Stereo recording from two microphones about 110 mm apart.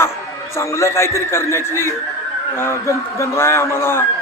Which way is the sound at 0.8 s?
25° left (ahead or behind).